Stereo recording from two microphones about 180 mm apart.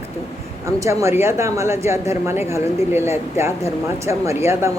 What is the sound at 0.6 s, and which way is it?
Speech, 15° right (ahead or behind).